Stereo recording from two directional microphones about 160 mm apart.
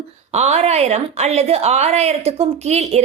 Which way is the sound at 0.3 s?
45° right (ahead or behind).